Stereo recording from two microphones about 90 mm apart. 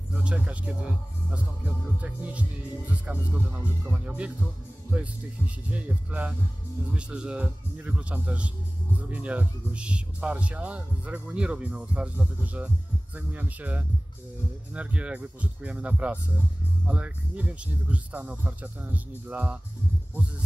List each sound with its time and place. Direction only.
0.1 s speech: 10° right (ahead or behind)
2.0 s speech: 15° right (ahead or behind)
5.7 s speech: 15° right (ahead or behind)